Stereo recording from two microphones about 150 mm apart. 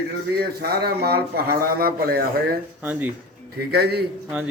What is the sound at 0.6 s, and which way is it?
A man's voice, 90° right.